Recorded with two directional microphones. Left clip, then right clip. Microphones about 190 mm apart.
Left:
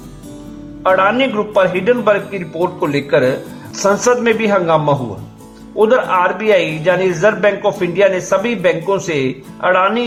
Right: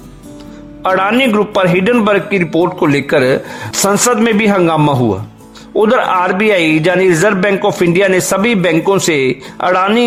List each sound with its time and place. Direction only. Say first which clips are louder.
0.8 s a man's voice: right 1 dB; 45° right (ahead or behind)
5.8 s a man's voice: right 1 dB; 45° right (ahead or behind)